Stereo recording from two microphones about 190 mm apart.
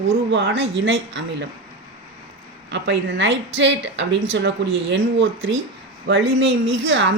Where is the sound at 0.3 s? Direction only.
70° right (ahead or behind).